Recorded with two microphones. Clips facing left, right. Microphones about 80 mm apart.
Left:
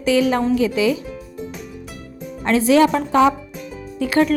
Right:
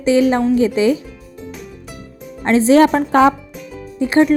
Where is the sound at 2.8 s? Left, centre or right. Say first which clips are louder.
Right 3 dB; right.